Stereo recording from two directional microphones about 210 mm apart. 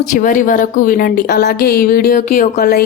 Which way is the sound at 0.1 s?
40° left (ahead or behind).